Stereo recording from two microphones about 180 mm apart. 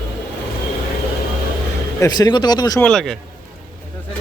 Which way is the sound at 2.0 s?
20° left (ahead or behind).